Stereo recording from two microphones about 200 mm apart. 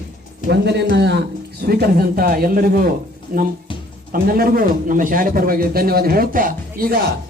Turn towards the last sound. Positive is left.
turn(degrees=-45)  # may be behind; listen again after turning